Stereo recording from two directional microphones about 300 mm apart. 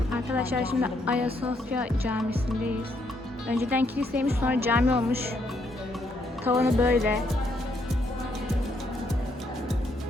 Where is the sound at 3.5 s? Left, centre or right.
Centre.